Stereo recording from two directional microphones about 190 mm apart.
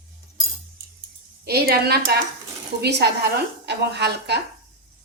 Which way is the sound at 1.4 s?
55° right (ahead or behind).